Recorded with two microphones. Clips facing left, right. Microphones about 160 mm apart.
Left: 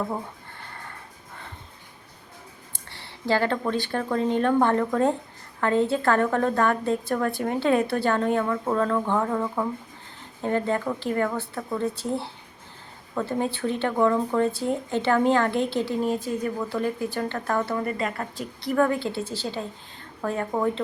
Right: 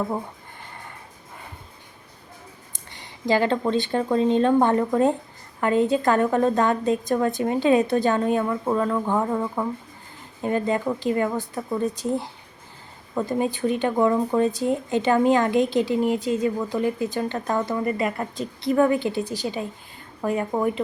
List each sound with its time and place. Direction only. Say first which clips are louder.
2.7 s speech: even; 15° right (ahead or behind)
18.2 s speech: right 4 dB; 20° right (ahead or behind)